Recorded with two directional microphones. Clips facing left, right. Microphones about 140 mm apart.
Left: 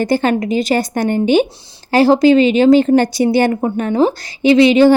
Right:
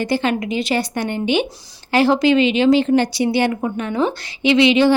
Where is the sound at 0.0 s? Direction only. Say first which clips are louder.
Left 5 dB; 45° left (ahead or behind).